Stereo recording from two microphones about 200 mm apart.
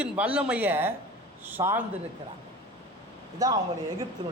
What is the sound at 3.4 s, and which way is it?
Speech, 15° right (ahead or behind).